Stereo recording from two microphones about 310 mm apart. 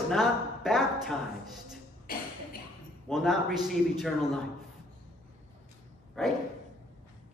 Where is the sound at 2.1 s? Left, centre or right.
Left.